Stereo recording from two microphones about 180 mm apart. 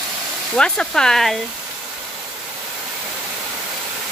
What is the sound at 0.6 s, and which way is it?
Speech, 5° left (ahead or behind).